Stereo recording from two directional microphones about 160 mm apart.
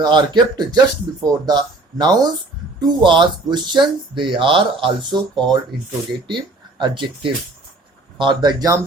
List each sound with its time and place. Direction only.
0.0 s speech: 25° right (ahead or behind)